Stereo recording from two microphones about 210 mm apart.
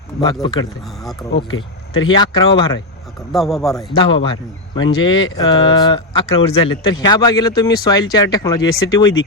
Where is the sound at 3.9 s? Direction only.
25° left (ahead or behind).